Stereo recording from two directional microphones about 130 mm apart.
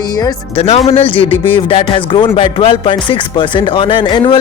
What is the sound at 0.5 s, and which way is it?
Speech, 55° left (ahead or behind).